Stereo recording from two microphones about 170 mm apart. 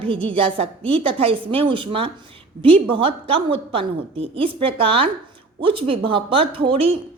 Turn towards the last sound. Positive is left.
turn(degrees=-35)  # may be behind; listen again after turning